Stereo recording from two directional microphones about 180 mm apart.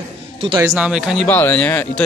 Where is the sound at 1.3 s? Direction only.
10° left (ahead or behind).